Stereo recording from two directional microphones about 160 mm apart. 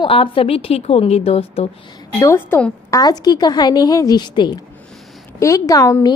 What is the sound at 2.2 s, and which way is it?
A woman's voice, 15° left (ahead or behind).